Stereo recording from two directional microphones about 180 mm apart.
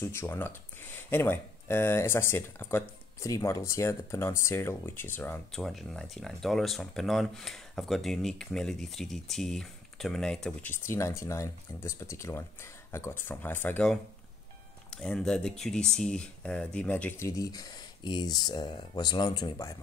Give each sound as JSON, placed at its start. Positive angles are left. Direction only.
{"t": 0.0, "sound": "speech", "side_deg": 15}